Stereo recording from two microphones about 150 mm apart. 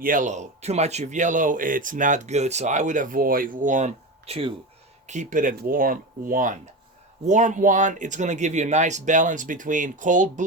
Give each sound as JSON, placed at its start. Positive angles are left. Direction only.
{"t": 0.0, "sound": "speech", "side_deg": -60}
{"t": 5.0, "sound": "speech", "side_deg": -55}